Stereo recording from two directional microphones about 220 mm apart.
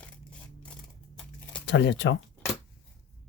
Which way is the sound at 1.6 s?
50° left (ahead or behind).